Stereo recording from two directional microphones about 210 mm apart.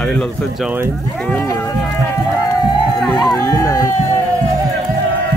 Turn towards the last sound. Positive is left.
turn(degrees=15)  # may be behind; listen again after turning